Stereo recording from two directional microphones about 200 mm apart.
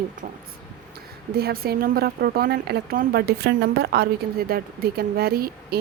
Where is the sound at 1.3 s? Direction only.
50° right (ahead or behind).